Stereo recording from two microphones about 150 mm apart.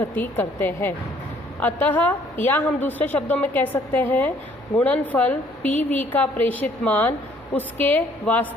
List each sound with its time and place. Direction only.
0.0 s a woman's voice: 15° left (ahead or behind)